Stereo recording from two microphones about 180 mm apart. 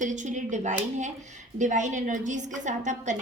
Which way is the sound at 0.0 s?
40° right (ahead or behind).